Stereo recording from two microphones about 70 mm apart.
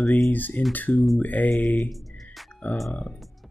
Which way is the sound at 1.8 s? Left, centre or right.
Centre.